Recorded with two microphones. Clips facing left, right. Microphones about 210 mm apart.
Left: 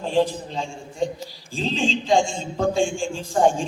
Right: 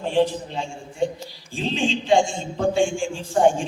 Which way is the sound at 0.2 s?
40° left (ahead or behind).